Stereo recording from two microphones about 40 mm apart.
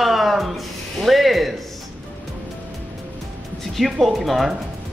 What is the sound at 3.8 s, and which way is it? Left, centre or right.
Speech, centre.